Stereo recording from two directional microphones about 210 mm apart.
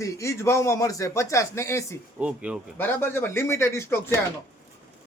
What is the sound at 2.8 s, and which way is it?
A man's voice, 10° left (ahead or behind).